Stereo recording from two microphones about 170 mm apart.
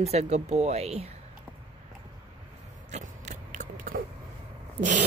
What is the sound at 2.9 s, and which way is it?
Biting, 45° right (ahead or behind).